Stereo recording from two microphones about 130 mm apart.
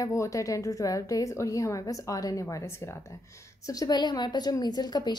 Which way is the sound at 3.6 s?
30° left (ahead or behind).